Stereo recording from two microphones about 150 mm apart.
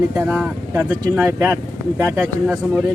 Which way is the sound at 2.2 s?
5° left (ahead or behind).